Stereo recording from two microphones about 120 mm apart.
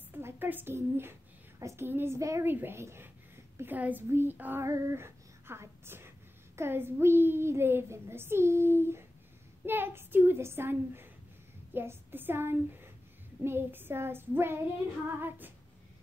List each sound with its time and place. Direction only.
0.2 s a woman's voice: 15° right (ahead or behind)
15.1 s female singing: 15° right (ahead or behind)